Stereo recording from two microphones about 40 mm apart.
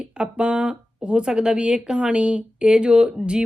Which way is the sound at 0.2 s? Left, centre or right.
Right.